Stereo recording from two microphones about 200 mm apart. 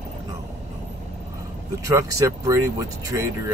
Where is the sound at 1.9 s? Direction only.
15° right (ahead or behind).